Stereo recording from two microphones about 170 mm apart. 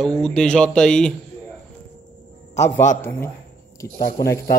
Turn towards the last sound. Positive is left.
turn(degrees=60)  # may be behind; listen again after turning